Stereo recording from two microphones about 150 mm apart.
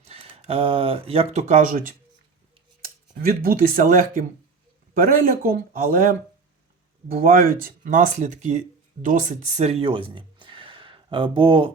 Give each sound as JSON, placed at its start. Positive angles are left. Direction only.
{"t": 0.0, "sound": "speech", "side_deg": -40}
{"t": 2.8, "sound": "speech", "side_deg": -75}